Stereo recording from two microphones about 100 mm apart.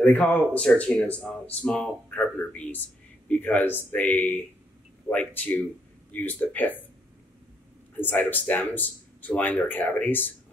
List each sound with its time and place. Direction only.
0.0 s speech: 15° left (ahead or behind)
8.0 s speech: 20° left (ahead or behind)